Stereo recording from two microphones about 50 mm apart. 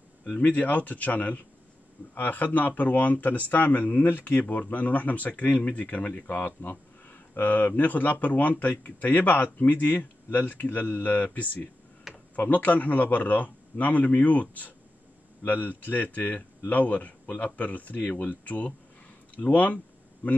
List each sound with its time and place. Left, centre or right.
0.5 s speech: left
12.4 s speech: left